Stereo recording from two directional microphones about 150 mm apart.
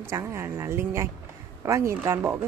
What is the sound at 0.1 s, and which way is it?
A woman's voice, 15° right (ahead or behind).